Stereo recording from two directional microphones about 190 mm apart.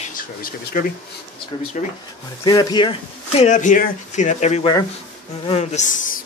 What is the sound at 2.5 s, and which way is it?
Speech, 20° left (ahead or behind).